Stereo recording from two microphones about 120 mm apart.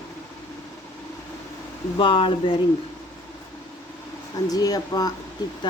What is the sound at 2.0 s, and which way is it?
Speech, 45° left (ahead or behind).